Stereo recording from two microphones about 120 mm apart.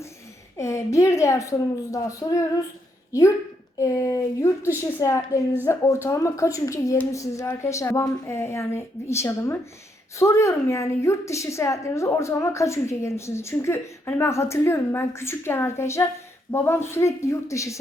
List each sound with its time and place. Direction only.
0.5 s a woman's voice: 25° left (ahead or behind)